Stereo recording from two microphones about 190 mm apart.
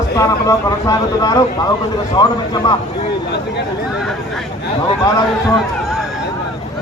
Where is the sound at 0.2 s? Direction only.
20° left (ahead or behind).